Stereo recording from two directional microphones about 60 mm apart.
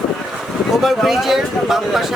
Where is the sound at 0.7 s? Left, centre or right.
Centre.